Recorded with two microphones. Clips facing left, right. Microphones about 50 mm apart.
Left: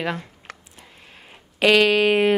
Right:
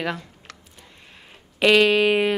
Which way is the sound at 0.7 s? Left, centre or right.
Centre.